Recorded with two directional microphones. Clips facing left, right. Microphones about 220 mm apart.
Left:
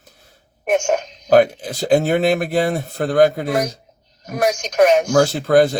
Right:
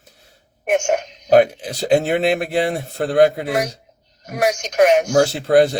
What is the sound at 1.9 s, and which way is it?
Speech, 25° right (ahead or behind).